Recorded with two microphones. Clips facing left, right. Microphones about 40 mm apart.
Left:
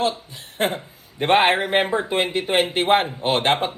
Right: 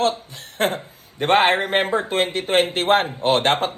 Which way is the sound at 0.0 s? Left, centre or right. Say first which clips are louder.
Right 2 dB; right.